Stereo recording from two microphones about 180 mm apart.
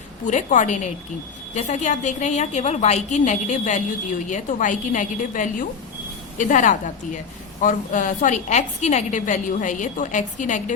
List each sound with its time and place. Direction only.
0.3 s a woman's voice: 40° left (ahead or behind)